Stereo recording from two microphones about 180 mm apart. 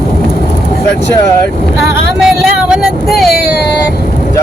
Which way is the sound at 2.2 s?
Centre (ahead or behind).